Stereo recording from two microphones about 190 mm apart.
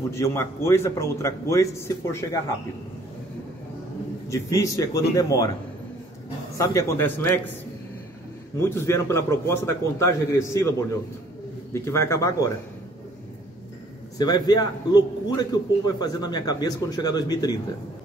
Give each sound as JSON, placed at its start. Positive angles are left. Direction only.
{"t": 0.1, "sound": "a man's voice", "side_deg": 15}
{"t": 4.3, "sound": "a man's voice", "side_deg": 15}
{"t": 6.6, "sound": "a man's voice", "side_deg": 15}
{"t": 8.5, "sound": "a man's voice", "side_deg": 15}
{"t": 14.1, "sound": "a man's voice", "side_deg": 20}